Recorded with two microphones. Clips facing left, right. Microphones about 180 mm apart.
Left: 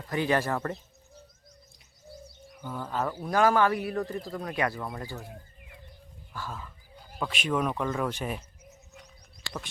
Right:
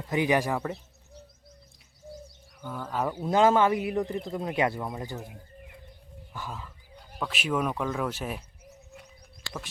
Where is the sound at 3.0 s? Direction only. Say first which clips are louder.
Right 3 dB; 20° right (ahead or behind).